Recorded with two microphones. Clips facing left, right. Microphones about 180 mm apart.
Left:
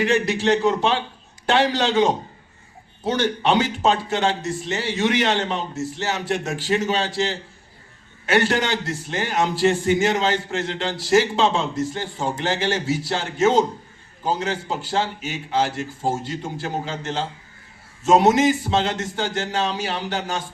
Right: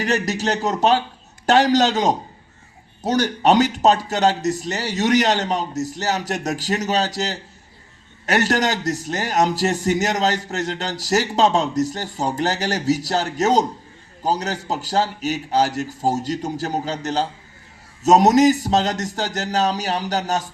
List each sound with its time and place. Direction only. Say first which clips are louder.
0.0 s a man's voice: left 2 dB; 40° right (ahead or behind)